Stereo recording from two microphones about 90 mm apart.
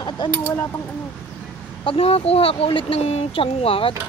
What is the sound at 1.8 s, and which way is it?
Speech, 85° left.